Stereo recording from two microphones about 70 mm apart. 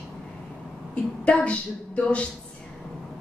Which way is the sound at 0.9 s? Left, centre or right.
Centre.